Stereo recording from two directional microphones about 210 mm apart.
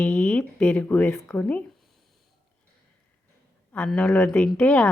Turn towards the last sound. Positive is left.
turn(degrees=5)  # may be behind; listen again after turning